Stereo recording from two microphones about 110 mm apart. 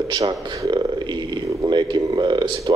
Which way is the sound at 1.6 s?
45° right (ahead or behind).